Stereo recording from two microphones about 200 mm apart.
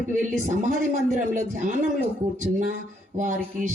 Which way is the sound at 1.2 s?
40° right (ahead or behind).